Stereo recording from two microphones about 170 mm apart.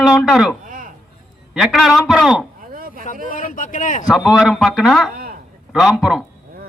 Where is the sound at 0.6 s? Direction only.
50° right (ahead or behind).